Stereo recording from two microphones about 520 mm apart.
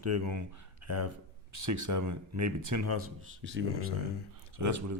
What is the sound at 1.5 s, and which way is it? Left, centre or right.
Speech, right.